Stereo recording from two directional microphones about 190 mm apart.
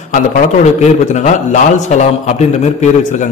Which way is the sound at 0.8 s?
40° left (ahead or behind).